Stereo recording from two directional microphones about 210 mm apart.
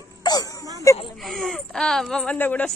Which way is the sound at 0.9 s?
15° left (ahead or behind).